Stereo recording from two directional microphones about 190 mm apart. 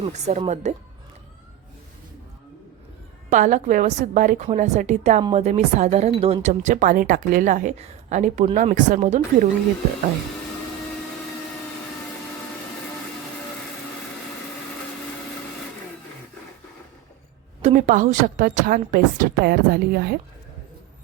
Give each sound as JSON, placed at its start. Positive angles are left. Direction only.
{"t": 0.0, "sound": "speech", "side_deg": -35}
{"t": 3.2, "sound": "speech", "side_deg": -40}
{"t": 17.6, "sound": "a woman's voice", "side_deg": -40}